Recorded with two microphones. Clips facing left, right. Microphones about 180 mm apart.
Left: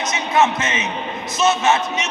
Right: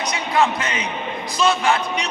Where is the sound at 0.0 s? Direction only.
20° left (ahead or behind).